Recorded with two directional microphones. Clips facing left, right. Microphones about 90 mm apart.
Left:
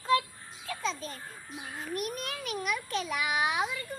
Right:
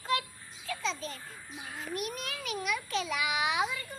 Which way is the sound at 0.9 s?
40° left (ahead or behind).